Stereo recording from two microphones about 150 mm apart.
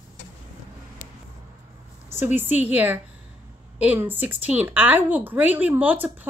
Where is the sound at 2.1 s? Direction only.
15° right (ahead or behind).